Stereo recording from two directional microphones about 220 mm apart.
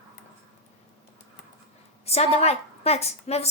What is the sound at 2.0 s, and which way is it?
A woman's voice, 30° left (ahead or behind).